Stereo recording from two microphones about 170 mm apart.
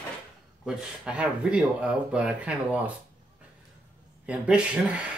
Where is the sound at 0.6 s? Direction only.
5° right (ahead or behind).